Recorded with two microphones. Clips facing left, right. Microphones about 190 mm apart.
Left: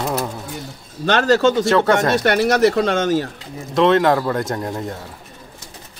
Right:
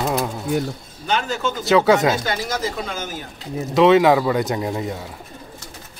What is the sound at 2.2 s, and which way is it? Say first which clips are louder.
Speech: left 9 dB; 70° left (ahead or behind).